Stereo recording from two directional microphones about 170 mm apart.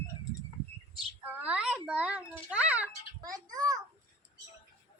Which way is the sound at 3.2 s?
20° right (ahead or behind).